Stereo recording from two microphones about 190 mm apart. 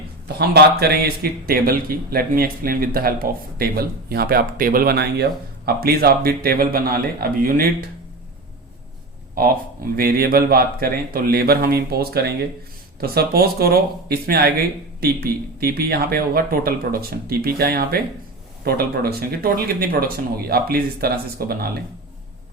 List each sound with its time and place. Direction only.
0.3 s speech: 55° right (ahead or behind)
9.3 s speech: 50° right (ahead or behind)